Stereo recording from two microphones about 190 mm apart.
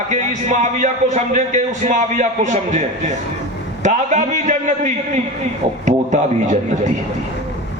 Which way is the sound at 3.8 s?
40° right (ahead or behind).